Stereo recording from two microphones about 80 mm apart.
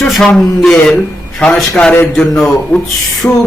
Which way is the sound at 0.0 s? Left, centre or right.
Centre.